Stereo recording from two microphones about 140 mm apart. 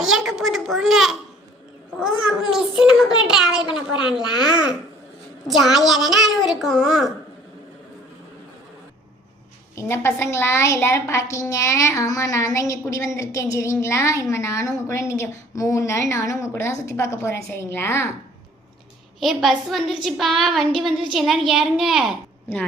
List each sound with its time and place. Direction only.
0.0 s a sound: 5° right (ahead or behind)
2.0 s a child's voice: 5° right (ahead or behind)
9.7 s a woman's voice: 20° left (ahead or behind)
19.2 s a woman's voice: centre (ahead or behind)